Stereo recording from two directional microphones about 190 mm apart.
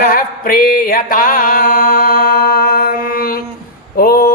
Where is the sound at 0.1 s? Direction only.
50° left (ahead or behind).